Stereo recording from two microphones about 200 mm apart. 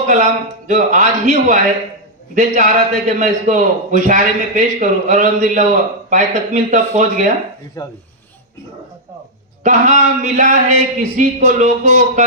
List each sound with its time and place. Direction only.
0.0 s a man's voice: 40° right (ahead or behind)
9.6 s a man's voice: 35° right (ahead or behind)